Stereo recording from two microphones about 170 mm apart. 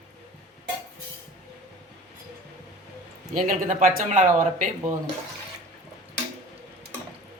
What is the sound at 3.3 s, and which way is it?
Speech, 50° right (ahead or behind).